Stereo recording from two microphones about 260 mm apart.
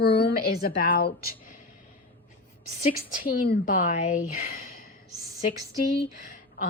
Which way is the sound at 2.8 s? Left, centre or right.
Left.